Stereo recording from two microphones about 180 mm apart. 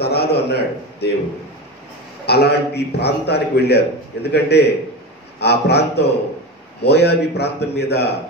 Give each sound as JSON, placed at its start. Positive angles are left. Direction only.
{"t": 0.0, "sound": "a man's voice", "side_deg": 65}
{"t": 2.2, "sound": "a man's voice", "side_deg": 65}